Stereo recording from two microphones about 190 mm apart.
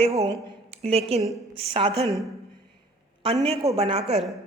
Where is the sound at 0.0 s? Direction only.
35° right (ahead or behind).